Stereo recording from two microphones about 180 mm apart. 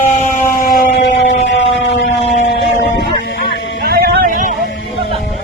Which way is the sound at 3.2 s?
85° left.